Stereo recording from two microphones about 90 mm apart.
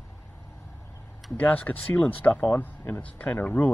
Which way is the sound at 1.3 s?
20° left (ahead or behind).